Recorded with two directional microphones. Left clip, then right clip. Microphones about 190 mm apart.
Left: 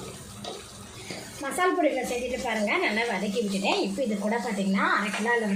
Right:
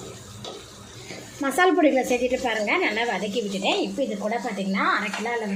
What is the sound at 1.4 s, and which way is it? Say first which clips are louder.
Speech: right 5 dB; 50° right (ahead or behind).